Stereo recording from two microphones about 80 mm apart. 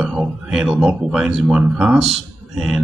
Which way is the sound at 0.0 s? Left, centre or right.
Centre.